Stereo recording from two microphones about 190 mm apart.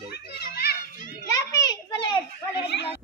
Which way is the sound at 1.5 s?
20° left (ahead or behind).